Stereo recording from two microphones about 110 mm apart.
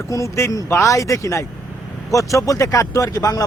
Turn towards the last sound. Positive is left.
turn(degrees=30)  # may be behind; listen again after turning